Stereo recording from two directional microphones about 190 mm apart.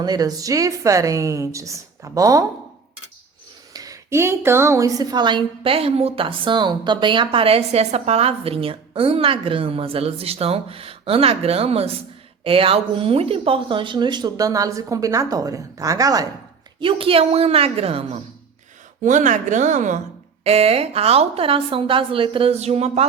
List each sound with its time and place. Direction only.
0.0 s a woman's voice: 20° right (ahead or behind)
3.7 s a woman's voice: 20° right (ahead or behind)
16.8 s a woman's voice: 30° right (ahead or behind)